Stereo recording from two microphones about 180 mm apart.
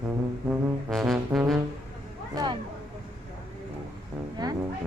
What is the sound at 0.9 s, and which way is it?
Brass instrument, centre (ahead or behind).